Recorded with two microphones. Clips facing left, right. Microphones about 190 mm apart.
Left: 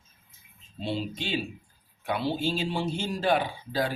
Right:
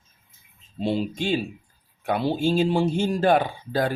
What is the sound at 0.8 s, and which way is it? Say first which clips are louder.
Speech: right 7 dB; 50° right (ahead or behind).